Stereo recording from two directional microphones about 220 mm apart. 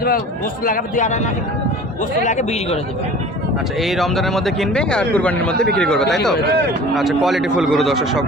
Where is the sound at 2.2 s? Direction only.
30° left (ahead or behind).